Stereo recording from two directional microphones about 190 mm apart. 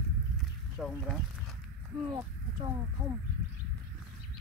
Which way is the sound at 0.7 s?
10° left (ahead or behind).